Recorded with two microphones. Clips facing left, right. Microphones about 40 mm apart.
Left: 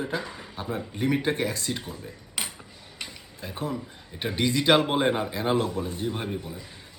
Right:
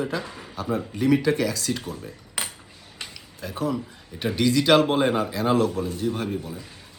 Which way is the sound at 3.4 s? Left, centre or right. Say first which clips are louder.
Right 5 dB; left.